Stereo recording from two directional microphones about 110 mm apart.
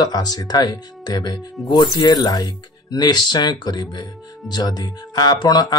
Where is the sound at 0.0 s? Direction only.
35° left (ahead or behind).